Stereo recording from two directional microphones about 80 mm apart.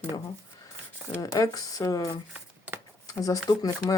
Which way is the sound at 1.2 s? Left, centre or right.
Left.